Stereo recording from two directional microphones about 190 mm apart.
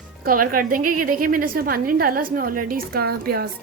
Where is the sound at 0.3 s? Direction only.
45° right (ahead or behind).